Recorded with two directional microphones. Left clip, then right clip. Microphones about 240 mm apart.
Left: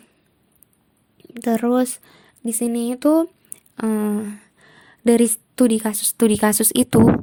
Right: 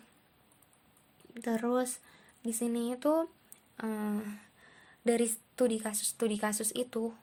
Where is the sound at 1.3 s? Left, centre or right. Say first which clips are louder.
Left 12 dB; left.